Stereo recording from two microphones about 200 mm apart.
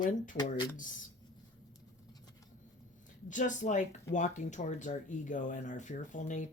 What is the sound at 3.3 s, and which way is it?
Speech, 40° left (ahead or behind).